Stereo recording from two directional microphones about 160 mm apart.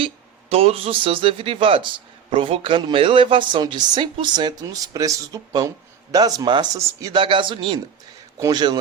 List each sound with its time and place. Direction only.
0.5 s speech: 35° right (ahead or behind)